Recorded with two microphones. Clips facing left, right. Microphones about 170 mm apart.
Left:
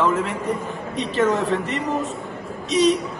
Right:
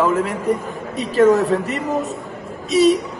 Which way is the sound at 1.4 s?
40° right (ahead or behind).